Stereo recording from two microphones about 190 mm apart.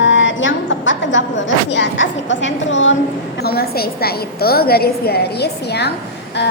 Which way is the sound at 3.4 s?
55° left (ahead or behind).